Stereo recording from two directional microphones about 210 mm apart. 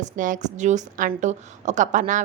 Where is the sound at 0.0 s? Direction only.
35° right (ahead or behind).